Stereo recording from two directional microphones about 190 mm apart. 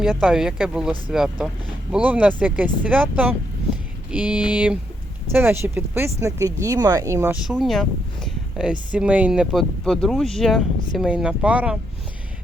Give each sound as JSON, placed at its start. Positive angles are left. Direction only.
{"t": 0.0, "sound": "speech", "side_deg": -5}
{"t": 7.4, "sound": "speech", "side_deg": 0}